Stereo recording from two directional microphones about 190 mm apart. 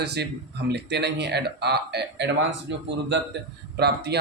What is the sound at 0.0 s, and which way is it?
Speech, 60° right (ahead or behind).